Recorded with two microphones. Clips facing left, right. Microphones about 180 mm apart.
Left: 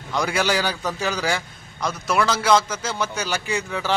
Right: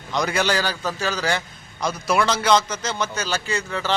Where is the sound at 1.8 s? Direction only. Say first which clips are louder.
Right 1 dB; centre (ahead or behind).